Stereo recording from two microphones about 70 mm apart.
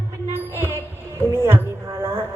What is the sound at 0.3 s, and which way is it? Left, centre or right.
Music, right.